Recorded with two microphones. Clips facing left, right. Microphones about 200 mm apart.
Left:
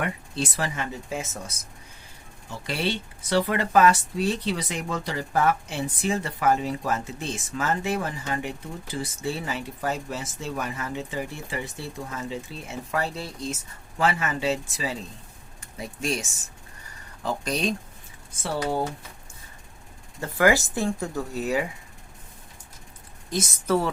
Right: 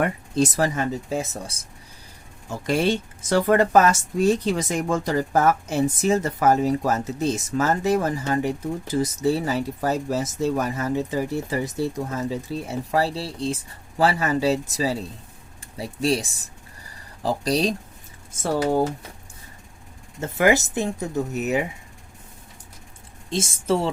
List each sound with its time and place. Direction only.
0.0 s speech: 40° right (ahead or behind)
2.5 s speech: 45° right (ahead or behind)
16.9 s a sound: 35° right (ahead or behind)
18.3 s speech: 45° right (ahead or behind)
20.1 s speech: 20° right (ahead or behind)
23.3 s speech: 25° right (ahead or behind)